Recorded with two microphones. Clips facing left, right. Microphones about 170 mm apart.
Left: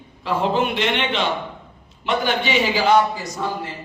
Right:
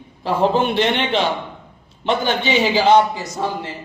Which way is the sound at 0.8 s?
35° right (ahead or behind).